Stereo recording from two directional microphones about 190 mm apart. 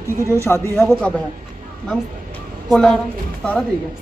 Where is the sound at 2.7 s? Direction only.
5° left (ahead or behind).